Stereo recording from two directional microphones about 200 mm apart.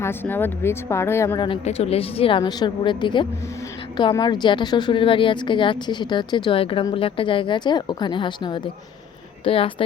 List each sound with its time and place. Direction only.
0.0 s speech: 10° left (ahead or behind)
1.5 s a woman's voice: 30° left (ahead or behind)